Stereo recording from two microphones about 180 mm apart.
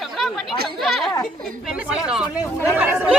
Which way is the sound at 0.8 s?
Centre (ahead or behind).